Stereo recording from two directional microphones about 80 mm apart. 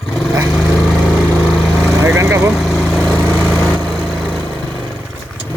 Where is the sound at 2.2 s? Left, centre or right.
Right.